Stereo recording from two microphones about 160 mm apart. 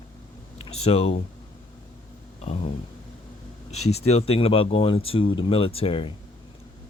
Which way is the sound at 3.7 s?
40° left (ahead or behind).